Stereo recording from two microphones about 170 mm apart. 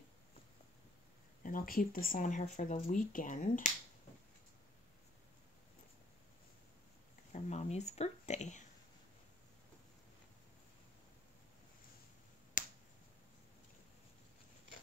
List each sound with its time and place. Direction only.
1.4 s speech: 55° left (ahead or behind)
7.3 s a sound: 40° left (ahead or behind)
12.6 s finger snapping: 50° left (ahead or behind)